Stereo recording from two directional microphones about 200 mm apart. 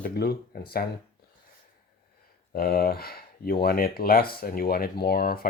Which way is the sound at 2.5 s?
50° left (ahead or behind).